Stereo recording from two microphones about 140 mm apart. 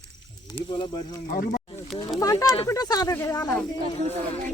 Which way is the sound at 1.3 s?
90° left.